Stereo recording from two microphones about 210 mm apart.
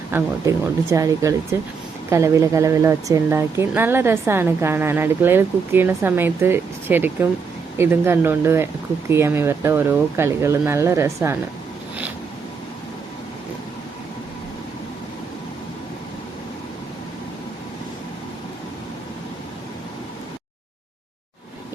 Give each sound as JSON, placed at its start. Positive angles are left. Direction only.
{"t": 0.1, "sound": "speech", "side_deg": -15}